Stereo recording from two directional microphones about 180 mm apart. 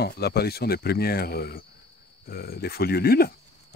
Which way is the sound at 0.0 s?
60° left (ahead or behind).